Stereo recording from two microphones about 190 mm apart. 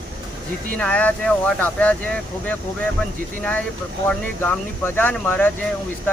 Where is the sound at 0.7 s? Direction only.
5° left (ahead or behind).